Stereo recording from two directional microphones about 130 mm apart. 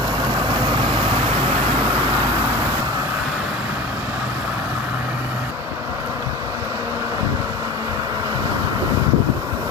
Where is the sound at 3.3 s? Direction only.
10° right (ahead or behind).